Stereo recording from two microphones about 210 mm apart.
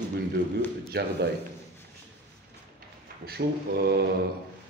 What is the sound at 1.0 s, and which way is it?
Speech, 50° right (ahead or behind).